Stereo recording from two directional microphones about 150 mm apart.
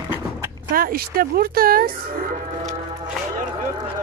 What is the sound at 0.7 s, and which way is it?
Speech, 85° right.